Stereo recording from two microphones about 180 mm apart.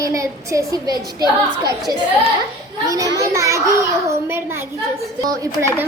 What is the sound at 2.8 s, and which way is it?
A woman's voice, 20° right (ahead or behind).